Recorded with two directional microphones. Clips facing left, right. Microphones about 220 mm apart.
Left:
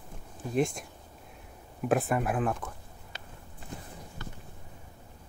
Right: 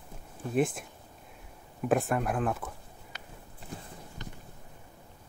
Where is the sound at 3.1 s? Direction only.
30° left (ahead or behind).